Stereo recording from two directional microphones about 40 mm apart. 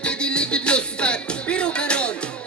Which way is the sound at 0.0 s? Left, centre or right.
Left.